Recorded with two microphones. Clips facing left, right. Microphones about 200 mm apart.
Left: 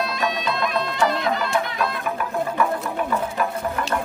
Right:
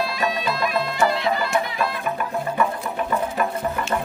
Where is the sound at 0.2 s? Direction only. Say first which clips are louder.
Even; 5° right (ahead or behind).